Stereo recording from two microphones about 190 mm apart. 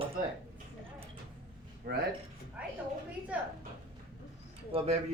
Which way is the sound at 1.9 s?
55° right (ahead or behind).